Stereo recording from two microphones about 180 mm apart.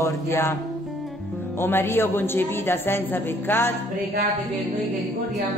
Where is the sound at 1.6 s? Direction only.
10° left (ahead or behind).